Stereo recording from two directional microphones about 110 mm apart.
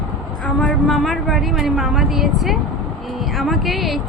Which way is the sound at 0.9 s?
Centre (ahead or behind).